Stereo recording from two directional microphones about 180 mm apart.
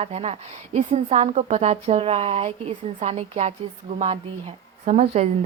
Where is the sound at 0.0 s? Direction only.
35° right (ahead or behind).